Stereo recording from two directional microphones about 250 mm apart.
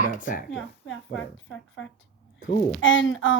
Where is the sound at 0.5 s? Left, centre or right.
Left.